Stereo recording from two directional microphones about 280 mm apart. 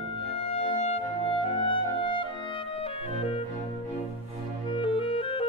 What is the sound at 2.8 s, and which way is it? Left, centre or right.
Organ, left.